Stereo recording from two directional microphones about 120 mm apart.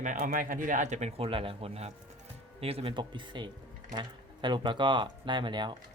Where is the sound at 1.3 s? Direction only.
50° right (ahead or behind).